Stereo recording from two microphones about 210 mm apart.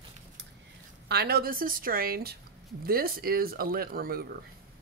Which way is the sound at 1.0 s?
50° right (ahead or behind).